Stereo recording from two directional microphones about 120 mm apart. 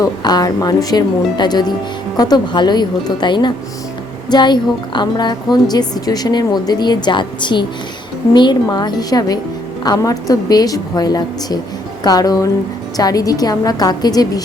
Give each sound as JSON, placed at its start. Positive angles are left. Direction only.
{"t": 0.0, "sound": "speech", "side_deg": 35}